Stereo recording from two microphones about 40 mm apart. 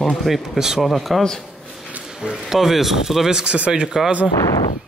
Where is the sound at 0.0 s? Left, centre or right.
Centre.